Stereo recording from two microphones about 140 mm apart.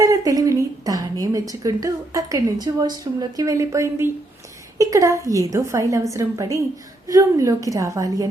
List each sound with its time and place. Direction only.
0.0 s a woman's voice: 25° right (ahead or behind)